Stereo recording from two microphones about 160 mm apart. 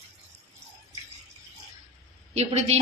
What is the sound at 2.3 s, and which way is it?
Speech, 40° right (ahead or behind).